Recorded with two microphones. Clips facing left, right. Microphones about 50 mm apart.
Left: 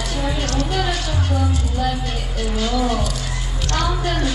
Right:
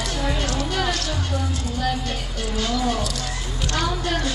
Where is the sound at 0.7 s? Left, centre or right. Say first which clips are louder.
Left 1 dB; centre.